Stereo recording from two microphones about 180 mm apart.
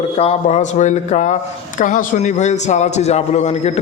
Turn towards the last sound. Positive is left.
turn(degrees=35)  # may be behind; listen again after turning